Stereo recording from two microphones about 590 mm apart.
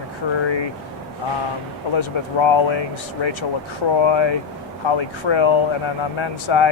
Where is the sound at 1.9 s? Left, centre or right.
Left.